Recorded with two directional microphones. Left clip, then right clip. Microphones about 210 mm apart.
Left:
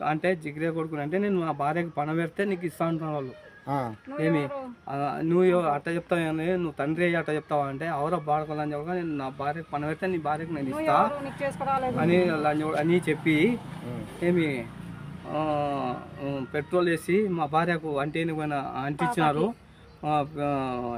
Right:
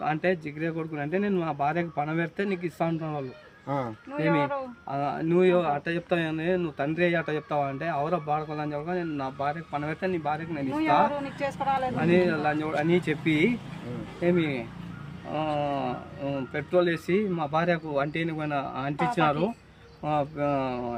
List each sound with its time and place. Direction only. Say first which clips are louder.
0.0 s speech: even; centre (ahead or behind)
11.3 s speech: even; 40° right (ahead or behind)
11.9 s speech: even; centre (ahead or behind)